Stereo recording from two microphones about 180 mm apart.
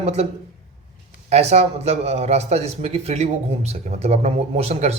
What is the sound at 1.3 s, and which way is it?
A man's voice, 35° right (ahead or behind).